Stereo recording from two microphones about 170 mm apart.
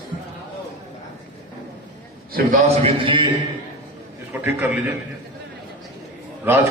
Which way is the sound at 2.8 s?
30° right (ahead or behind).